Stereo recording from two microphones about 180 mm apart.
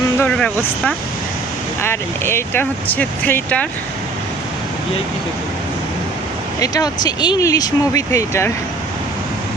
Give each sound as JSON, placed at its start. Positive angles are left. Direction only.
{"t": 0.2, "sound": "speech", "side_deg": 5}
{"t": 6.6, "sound": "speech", "side_deg": 20}